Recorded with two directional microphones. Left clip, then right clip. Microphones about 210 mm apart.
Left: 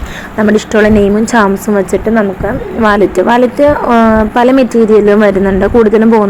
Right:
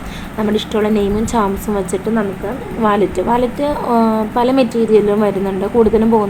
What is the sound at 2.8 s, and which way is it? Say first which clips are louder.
A woman's voice: left 6 dB; 20° left (ahead or behind).